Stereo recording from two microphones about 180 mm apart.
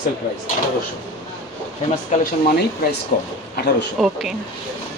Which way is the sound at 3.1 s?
50° left (ahead or behind).